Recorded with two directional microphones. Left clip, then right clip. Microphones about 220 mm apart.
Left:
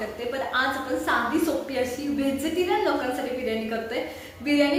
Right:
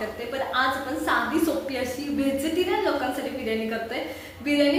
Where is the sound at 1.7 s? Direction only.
Centre (ahead or behind).